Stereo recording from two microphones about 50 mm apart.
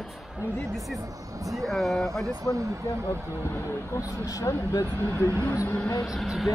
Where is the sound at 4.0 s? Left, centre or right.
Left.